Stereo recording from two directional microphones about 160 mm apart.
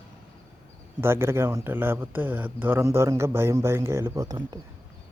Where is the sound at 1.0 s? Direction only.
15° right (ahead or behind).